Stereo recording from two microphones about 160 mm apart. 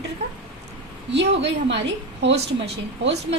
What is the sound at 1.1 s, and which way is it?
A woman's voice, 90° right.